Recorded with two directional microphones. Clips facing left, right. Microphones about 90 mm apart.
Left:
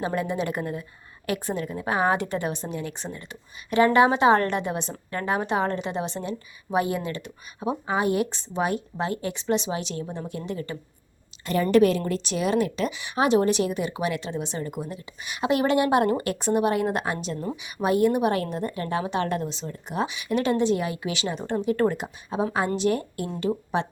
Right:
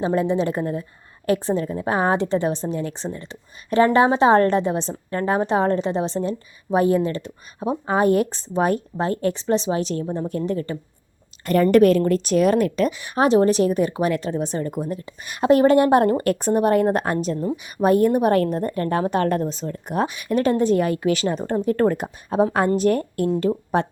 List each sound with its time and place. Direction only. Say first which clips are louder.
0.0 s speech: right 6 dB; 30° right (ahead or behind)
11.4 s a woman's voice: right 5 dB; 50° right (ahead or behind)